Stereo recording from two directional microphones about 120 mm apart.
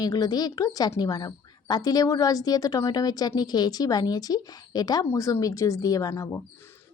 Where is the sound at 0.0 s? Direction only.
35° left (ahead or behind).